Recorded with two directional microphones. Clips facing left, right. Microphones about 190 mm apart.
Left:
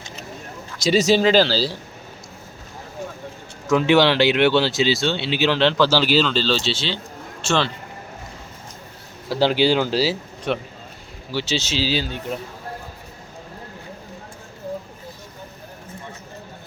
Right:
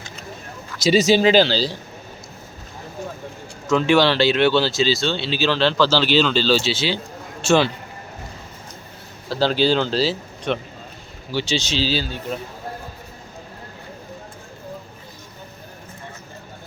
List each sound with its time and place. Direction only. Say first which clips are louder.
0.8 s speech: right 1 dB; centre (ahead or behind)
3.7 s speech: left 1 dB; 15° left (ahead or behind)
6.2 s speech: right 3 dB; 5° right (ahead or behind)
9.3 s speech: left 1 dB; 15° left (ahead or behind)